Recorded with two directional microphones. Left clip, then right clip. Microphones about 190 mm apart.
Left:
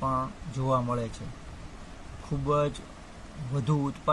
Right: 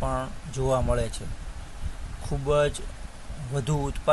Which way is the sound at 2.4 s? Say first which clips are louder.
Right 4 dB; 15° right (ahead or behind).